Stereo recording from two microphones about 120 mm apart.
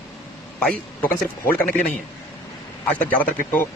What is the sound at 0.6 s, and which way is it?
A man's voice, 5° left (ahead or behind).